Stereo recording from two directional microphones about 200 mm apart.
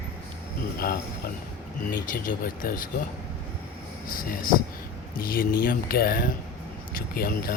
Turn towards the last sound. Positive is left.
turn(degrees=50)  # may be behind; listen again after turning